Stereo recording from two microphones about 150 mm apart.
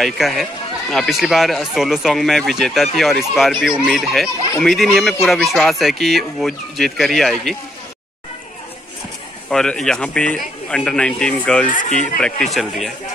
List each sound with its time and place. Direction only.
0.0 s speech: centre (ahead or behind)
9.5 s speech: 5° left (ahead or behind)
11.7 s speech: 60° left (ahead or behind)
12.2 s speech: 5° left (ahead or behind)